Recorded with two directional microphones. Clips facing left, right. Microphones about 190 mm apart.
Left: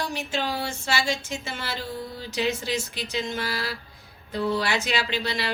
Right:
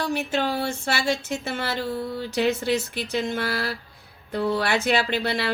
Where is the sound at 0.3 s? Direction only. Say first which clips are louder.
Right 4 dB; 55° right (ahead or behind).